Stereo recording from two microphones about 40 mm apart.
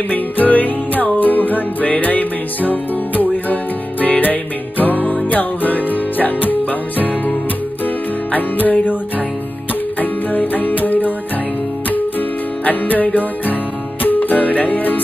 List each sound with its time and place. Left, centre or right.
0.1 s music: left
9.9 s music: left
12.6 s music: left